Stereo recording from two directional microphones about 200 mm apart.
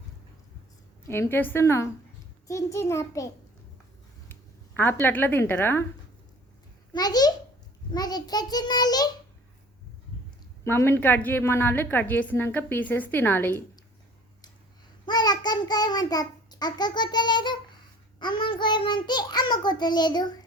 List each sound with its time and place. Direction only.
1.0 s a woman's voice: 10° left (ahead or behind)
4.8 s a woman's voice: 10° left (ahead or behind)
6.9 s a child's voice: 20° left (ahead or behind)
10.6 s a woman's voice: 15° left (ahead or behind)
15.0 s child singing: 20° left (ahead or behind)
18.2 s a child's voice: 25° left (ahead or behind)